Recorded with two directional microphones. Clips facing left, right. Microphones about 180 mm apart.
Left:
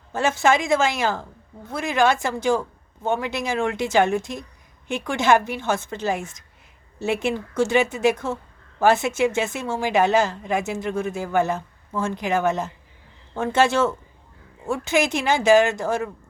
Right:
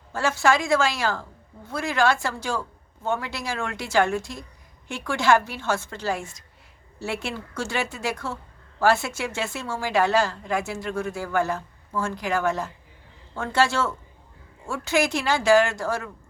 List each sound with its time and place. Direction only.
0.1 s a woman's voice: 20° left (ahead or behind)